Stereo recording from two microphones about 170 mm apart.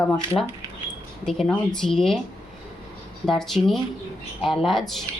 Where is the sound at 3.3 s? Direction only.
Centre (ahead or behind).